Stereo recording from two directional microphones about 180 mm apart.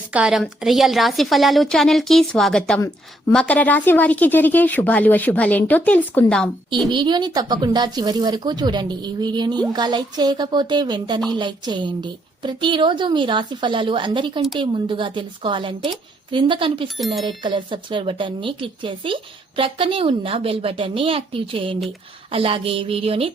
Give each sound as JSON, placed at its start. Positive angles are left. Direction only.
{"t": 0.1, "sound": "a woman's voice", "side_deg": -5}
{"t": 6.9, "sound": "speech", "side_deg": -25}